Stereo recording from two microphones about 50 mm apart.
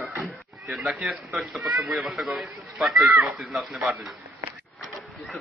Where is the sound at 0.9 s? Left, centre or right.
Right.